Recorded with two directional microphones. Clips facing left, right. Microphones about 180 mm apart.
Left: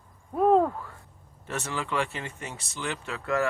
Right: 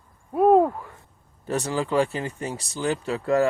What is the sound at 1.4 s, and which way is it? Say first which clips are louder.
Speech: right 7 dB; 35° right (ahead or behind).